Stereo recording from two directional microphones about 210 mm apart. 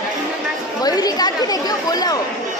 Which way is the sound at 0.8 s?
20° left (ahead or behind).